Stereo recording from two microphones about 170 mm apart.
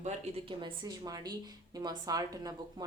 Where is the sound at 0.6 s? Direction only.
25° right (ahead or behind).